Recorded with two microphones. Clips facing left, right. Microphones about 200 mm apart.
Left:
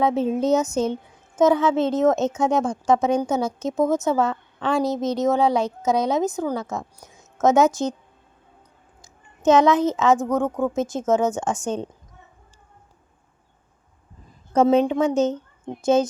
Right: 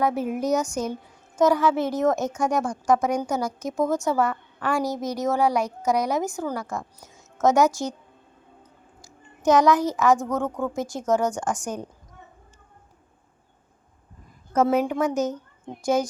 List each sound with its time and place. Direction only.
0.0 s a woman's voice: 25° left (ahead or behind)
9.0 s a sound: 20° left (ahead or behind)
10.3 s a woman's voice: 15° left (ahead or behind)
14.5 s a woman's voice: 25° left (ahead or behind)